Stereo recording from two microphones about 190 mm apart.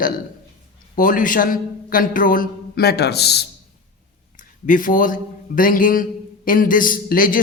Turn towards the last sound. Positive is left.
turn(degrees=45)  # may be behind; listen again after turning